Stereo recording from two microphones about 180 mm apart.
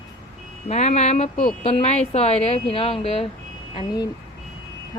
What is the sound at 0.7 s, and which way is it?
A woman's voice, 40° left (ahead or behind).